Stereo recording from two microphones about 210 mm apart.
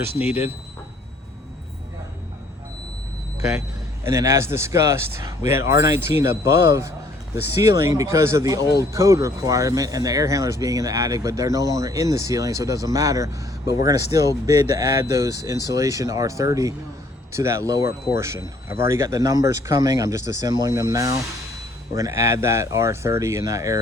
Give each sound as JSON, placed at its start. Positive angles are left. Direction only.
{"t": 0.2, "sound": "speech", "side_deg": 30}
{"t": 4.0, "sound": "speech", "side_deg": -15}